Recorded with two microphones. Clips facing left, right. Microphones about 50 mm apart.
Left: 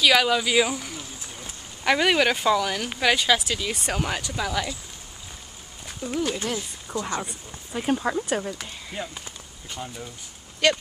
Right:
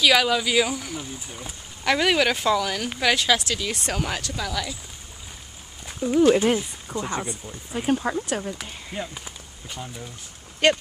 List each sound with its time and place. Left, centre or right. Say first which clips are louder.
0.0 s speech: even; centre
0.9 s a sound: right 4 dB; centre
1.9 s speech: even; centre
5.9 s speech: right 9 dB; centre
7.0 s speech: even; centre
7.7 s speech: right 1 dB; centre
10.6 s speech: right 2 dB; right